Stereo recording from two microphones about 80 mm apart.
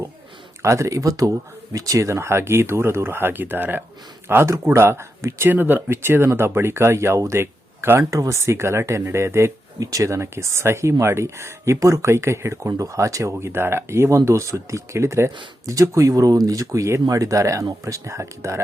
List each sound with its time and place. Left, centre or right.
0.6 s speech: right
4.3 s speech: right
9.8 s speech: right
13.3 s speech: right